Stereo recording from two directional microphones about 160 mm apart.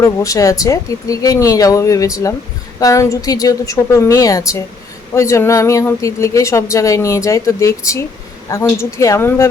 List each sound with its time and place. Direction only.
0.0 s a woman's voice: 20° left (ahead or behind)